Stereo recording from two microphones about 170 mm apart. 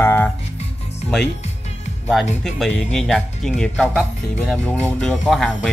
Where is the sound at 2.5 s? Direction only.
5° left (ahead or behind).